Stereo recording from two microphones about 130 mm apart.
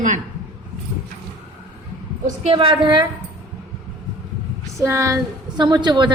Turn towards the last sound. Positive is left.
turn(degrees=-35)  # may be behind; listen again after turning